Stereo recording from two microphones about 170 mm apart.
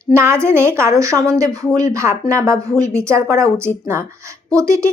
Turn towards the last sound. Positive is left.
turn(degrees=-20)  # may be behind; listen again after turning